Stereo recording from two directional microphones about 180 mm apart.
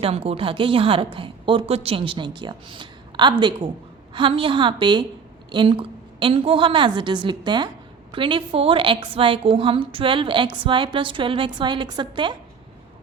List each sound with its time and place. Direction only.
0.0 s a woman's voice: 35° right (ahead or behind)